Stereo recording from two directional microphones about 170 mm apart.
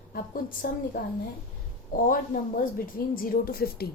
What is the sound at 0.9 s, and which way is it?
Speech, 55° left (ahead or behind).